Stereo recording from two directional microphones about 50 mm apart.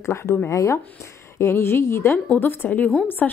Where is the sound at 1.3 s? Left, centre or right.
Left.